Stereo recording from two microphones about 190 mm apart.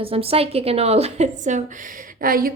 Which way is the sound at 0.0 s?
30° right (ahead or behind).